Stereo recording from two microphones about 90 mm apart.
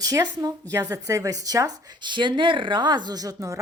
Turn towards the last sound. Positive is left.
turn(degrees=-40)  # may be behind; listen again after turning